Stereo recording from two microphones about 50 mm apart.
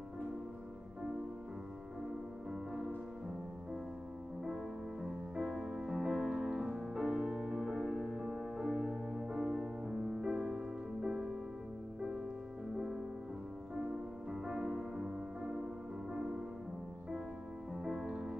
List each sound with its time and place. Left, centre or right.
5.0 s music: centre
12.7 s music: centre
14.3 s music: centre
18.0 s music: centre